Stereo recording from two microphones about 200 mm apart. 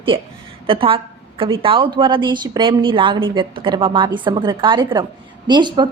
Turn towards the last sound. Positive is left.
turn(degrees=-20)  # may be behind; listen again after turning